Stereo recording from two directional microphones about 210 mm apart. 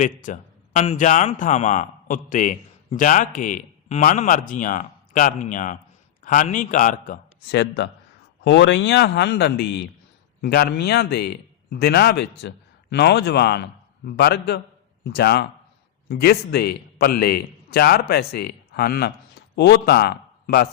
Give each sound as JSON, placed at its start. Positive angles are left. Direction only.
{"t": 0.0, "sound": "a man's voice", "side_deg": 35}
{"t": 7.5, "sound": "a man's voice", "side_deg": 55}